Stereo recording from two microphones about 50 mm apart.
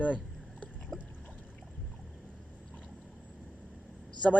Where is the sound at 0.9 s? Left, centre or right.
Centre.